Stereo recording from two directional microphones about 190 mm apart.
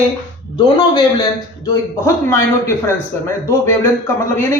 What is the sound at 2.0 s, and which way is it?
A man's voice, 15° left (ahead or behind).